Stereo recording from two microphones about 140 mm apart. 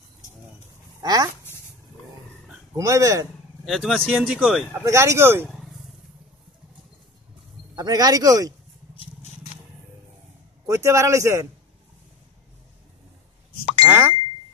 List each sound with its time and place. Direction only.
1.0 s speech: 25° right (ahead or behind)
2.7 s speech: 25° right (ahead or behind)
3.6 s speech: centre (ahead or behind)
4.8 s speech: 20° right (ahead or behind)
5.5 s a sound: centre (ahead or behind)
7.7 s speech: 30° right (ahead or behind)
10.7 s speech: 20° right (ahead or behind)
13.8 s speech: 15° right (ahead or behind)